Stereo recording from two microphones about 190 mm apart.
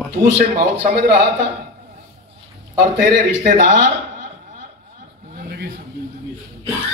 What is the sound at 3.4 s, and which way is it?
Speech, 45° right (ahead or behind).